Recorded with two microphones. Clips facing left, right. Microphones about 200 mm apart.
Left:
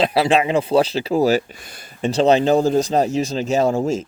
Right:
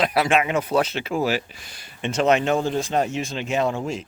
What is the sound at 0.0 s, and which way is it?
Speech, 30° left (ahead or behind).